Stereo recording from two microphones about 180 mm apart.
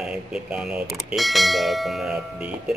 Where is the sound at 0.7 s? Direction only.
Centre (ahead or behind).